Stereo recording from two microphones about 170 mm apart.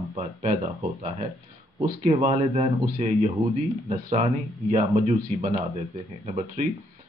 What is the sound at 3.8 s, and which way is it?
A man's voice, 40° right (ahead or behind).